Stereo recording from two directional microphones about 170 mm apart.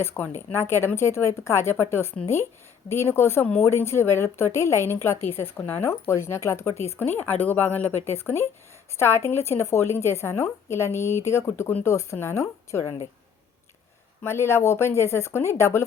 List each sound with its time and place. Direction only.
0.0 s speech: 15° left (ahead or behind)
14.3 s speech: 15° left (ahead or behind)